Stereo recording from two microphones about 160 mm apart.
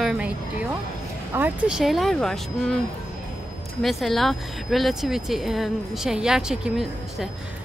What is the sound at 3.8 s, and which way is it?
Speech, centre (ahead or behind).